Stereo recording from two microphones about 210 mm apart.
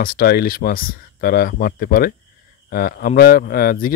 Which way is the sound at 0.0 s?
45° left (ahead or behind).